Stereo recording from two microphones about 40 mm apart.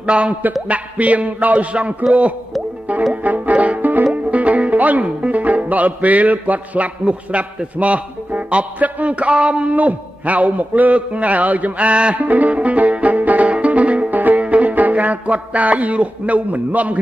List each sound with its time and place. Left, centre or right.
0.0 s a man's voice: right
3.1 s music: right
4.1 s music: right
7.1 s a man's voice: right
9.8 s a man's voice: right
12.3 s music: right